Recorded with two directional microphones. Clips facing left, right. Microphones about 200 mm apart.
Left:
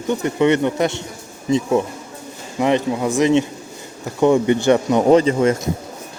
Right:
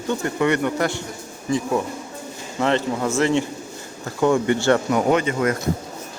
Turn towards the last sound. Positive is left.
turn(degrees=30)  # may be behind; listen again after turning